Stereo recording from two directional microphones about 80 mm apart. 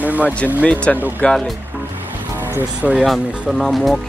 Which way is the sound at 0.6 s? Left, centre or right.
Centre.